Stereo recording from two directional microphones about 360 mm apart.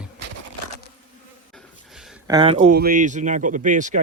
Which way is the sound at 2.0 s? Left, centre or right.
Centre.